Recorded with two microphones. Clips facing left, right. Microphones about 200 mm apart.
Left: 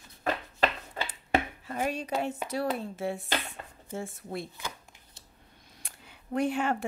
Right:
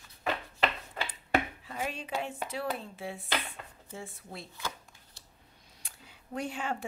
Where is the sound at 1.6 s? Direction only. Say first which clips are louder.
Left 5 dB; 45° left (ahead or behind).